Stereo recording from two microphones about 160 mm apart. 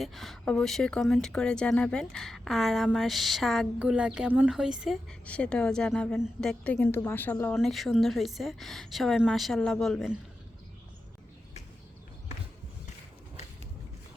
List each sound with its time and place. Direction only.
0.0 s speech: centre (ahead or behind)
5.2 s speech: 5° left (ahead or behind)